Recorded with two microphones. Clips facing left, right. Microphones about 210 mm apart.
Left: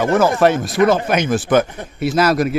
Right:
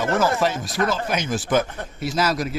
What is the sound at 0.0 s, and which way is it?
Speech, 60° left (ahead or behind).